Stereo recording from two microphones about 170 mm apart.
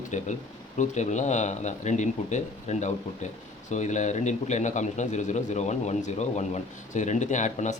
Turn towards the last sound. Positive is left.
turn(degrees=45)  # may be behind; listen again after turning